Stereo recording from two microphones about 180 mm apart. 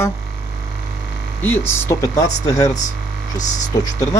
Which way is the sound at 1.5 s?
15° left (ahead or behind).